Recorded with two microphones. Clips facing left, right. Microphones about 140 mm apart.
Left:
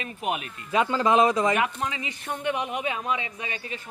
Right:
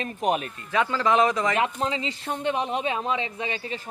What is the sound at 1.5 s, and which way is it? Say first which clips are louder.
Speech: right 1 dB; 25° right (ahead or behind).